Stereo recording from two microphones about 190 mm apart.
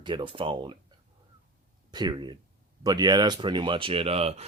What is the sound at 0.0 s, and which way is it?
Speech, 25° right (ahead or behind).